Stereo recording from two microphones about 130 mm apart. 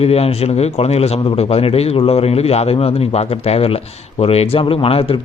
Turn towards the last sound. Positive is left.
turn(degrees=45)  # may be behind; listen again after turning